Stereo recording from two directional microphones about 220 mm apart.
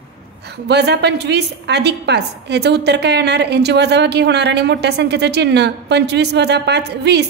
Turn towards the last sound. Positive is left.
turn(degrees=-50)  # may be behind; listen again after turning